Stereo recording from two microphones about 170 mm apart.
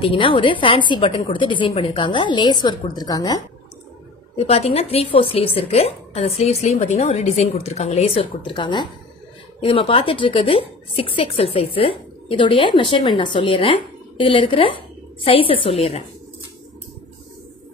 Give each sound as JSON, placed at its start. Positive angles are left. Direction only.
{"t": 0.0, "sound": "a woman's voice", "side_deg": 30}
{"t": 4.4, "sound": "a woman's voice", "side_deg": 35}